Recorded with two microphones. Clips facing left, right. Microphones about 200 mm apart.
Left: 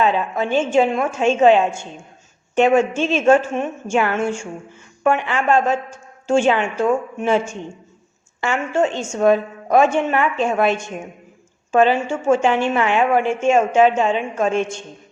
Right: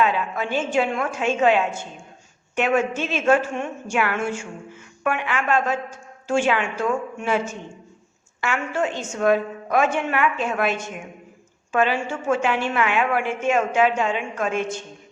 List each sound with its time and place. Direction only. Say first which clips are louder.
0.0 s a woman's voice: left 3 dB; 25° left (ahead or behind)